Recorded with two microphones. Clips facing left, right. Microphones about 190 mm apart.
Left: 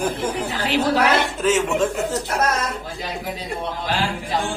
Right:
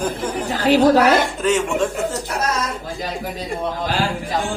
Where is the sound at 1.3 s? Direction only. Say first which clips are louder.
Even; centre (ahead or behind).